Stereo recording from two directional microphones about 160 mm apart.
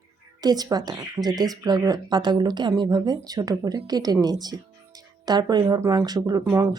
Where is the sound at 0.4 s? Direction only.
25° right (ahead or behind).